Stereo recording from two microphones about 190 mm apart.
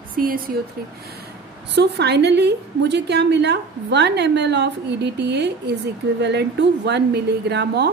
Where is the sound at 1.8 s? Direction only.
60° right (ahead or behind).